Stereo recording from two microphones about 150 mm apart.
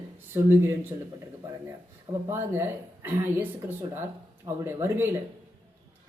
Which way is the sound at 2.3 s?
15° right (ahead or behind).